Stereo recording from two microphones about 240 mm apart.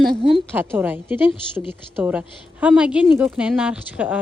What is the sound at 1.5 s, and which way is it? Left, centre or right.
Speech, centre.